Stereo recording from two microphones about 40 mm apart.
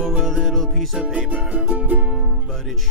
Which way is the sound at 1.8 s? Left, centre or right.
Right.